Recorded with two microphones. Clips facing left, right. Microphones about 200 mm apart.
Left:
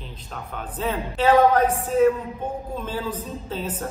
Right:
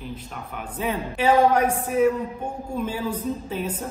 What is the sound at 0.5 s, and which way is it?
A man's voice, 10° right (ahead or behind).